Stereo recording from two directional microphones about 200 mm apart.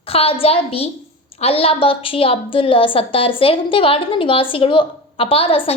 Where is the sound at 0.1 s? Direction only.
30° left (ahead or behind).